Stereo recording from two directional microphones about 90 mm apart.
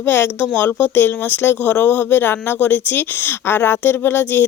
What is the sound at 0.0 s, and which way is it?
Speech, 25° left (ahead or behind).